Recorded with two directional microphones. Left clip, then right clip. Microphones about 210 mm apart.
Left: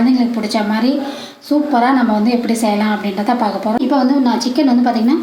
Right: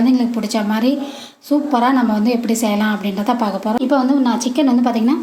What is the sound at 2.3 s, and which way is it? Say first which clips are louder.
A woman's voice: left 2 dB; 55° right (ahead or behind).